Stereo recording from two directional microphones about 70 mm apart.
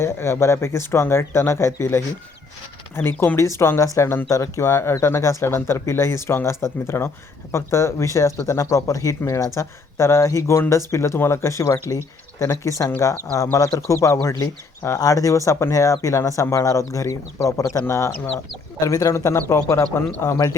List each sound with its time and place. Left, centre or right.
0.0 s speech: left
19.5 s speech: left